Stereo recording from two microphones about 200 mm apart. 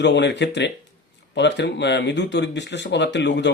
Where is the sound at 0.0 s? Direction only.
60° left (ahead or behind).